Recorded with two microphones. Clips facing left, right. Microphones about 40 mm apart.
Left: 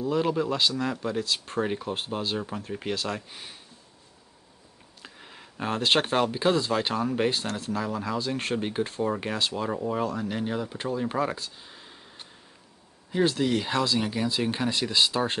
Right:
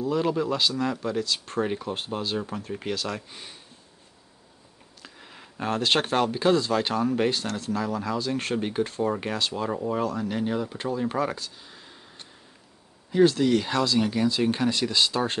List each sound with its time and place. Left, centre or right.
0.0 s speech: centre
5.0 s speech: centre